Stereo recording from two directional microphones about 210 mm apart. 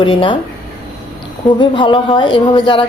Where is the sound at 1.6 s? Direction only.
25° left (ahead or behind).